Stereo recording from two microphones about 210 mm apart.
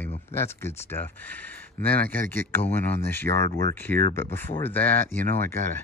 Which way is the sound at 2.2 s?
10° left (ahead or behind).